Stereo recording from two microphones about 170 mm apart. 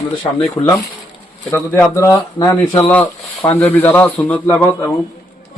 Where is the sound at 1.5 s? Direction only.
15° left (ahead or behind).